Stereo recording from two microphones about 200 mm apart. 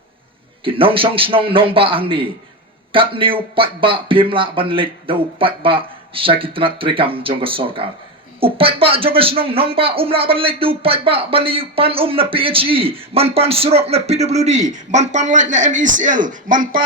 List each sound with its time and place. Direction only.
0.6 s speech: 25° right (ahead or behind); by 16.8 s 40° right (ahead or behind)